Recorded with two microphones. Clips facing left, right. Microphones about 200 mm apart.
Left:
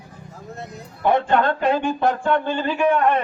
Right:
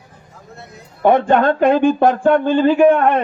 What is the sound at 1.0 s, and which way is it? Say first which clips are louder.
Speech: right 5 dB; 50° right (ahead or behind).